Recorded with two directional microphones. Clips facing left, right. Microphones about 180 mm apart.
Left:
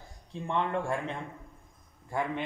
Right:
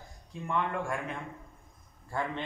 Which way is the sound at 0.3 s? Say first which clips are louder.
Left 2 dB; 30° left (ahead or behind).